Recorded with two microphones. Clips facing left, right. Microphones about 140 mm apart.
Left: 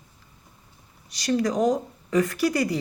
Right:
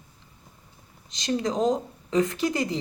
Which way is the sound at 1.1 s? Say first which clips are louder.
Left 3 dB; 20° right (ahead or behind).